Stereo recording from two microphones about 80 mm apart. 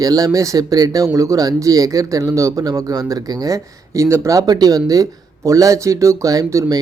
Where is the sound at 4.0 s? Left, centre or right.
Right.